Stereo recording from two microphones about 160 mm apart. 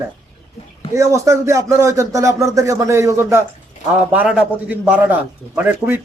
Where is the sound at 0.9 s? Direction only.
20° right (ahead or behind).